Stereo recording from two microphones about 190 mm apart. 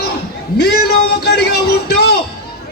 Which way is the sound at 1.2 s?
60° left (ahead or behind).